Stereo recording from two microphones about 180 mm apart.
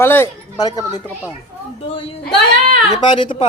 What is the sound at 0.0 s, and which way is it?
Speech, 10° left (ahead or behind).